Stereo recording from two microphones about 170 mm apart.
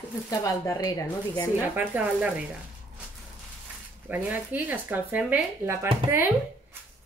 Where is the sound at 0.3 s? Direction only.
20° left (ahead or behind).